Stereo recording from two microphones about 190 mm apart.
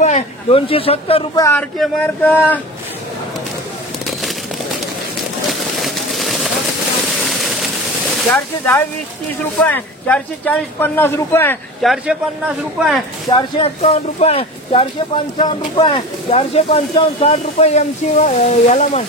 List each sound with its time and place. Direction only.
0.0 s speech: 35° left (ahead or behind)
1.4 s speech: 10° left (ahead or behind)
5.5 s a sound: centre (ahead or behind)
8.3 s speech: 5° left (ahead or behind)
11.8 s a man's voice: centre (ahead or behind)
13.3 s speech: 30° left (ahead or behind)